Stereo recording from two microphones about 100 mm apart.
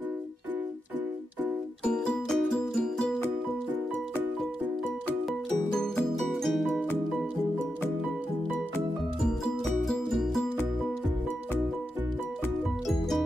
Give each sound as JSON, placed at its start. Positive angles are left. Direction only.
{"t": 1.9, "sound": "music", "side_deg": 5}
{"t": 6.1, "sound": "music", "side_deg": 0}
{"t": 9.2, "sound": "music", "side_deg": 5}